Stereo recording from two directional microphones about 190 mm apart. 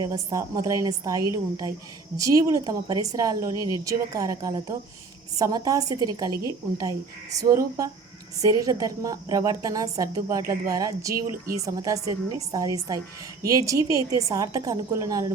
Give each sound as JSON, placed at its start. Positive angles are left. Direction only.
{"t": 0.0, "sound": "a woman's voice", "side_deg": -20}